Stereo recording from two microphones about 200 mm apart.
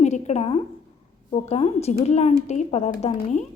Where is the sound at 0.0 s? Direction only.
35° left (ahead or behind).